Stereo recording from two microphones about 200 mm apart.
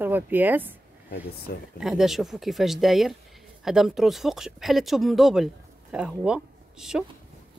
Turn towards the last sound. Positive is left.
turn(degrees=-5)  # may be behind; listen again after turning